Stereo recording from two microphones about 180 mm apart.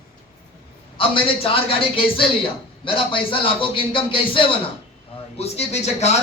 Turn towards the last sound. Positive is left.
turn(degrees=40)  # may be behind; listen again after turning